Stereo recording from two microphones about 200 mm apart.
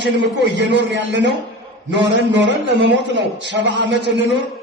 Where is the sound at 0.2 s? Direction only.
60° right (ahead or behind).